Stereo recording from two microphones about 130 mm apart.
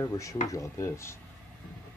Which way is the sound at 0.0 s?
25° left (ahead or behind).